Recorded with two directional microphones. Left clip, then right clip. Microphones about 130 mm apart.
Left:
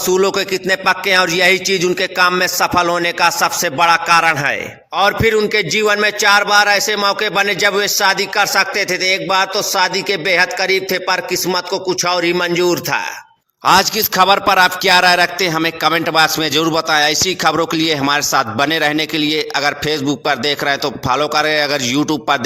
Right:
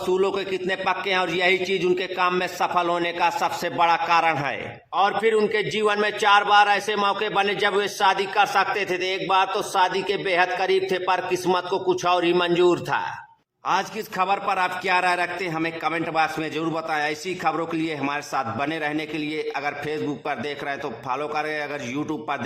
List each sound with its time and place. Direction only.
0.1 s speech: 30° left (ahead or behind)
4.9 s music: 30° left (ahead or behind)
5.5 s speech: 30° left (ahead or behind)
13.7 s music: 50° left (ahead or behind)